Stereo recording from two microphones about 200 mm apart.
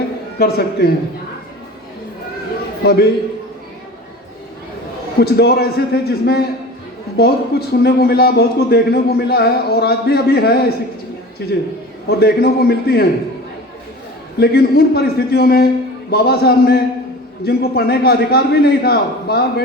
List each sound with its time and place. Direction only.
0.3 s a man's voice: 50° left (ahead or behind)
2.8 s a man's voice: 50° left (ahead or behind)
5.2 s a man's voice: 50° left (ahead or behind)
14.3 s a man's voice: 55° left (ahead or behind)